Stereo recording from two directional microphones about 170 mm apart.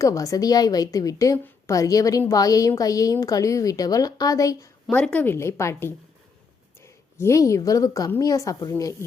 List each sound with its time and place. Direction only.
0.0 s a woman's voice: 20° left (ahead or behind)
4.9 s a woman's voice: 10° left (ahead or behind)